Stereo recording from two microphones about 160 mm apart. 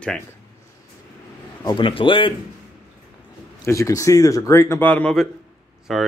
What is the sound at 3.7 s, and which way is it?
Speech, 20° left (ahead or behind).